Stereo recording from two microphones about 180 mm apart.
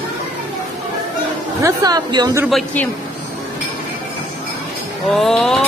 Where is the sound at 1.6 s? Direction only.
20° right (ahead or behind).